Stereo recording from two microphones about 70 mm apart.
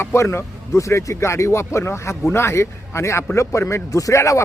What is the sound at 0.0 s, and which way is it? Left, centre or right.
A man's voice, left.